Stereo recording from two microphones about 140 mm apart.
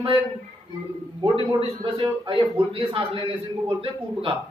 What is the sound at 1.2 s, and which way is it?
A man's voice, 35° right (ahead or behind).